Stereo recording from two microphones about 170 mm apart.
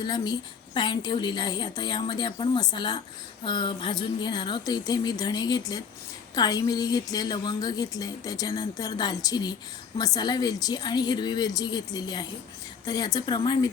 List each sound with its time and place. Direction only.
0.0 s a woman's voice: 25° left (ahead or behind)